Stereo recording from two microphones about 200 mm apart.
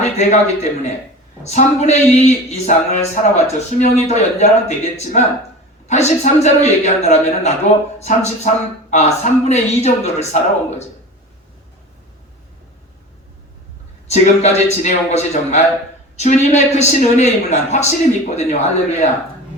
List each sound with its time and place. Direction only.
0.0 s speech: 35° left (ahead or behind)
14.1 s speech: 35° left (ahead or behind)